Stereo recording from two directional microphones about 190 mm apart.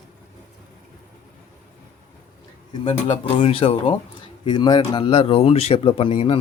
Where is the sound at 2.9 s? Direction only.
30° left (ahead or behind).